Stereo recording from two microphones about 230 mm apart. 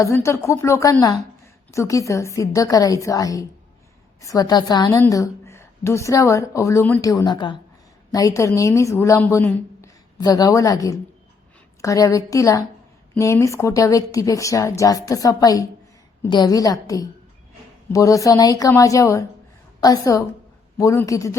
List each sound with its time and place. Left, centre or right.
0.0 s a woman's voice: centre